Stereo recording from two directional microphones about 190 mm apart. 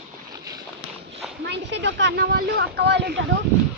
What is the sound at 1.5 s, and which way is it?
Speech, 65° right (ahead or behind).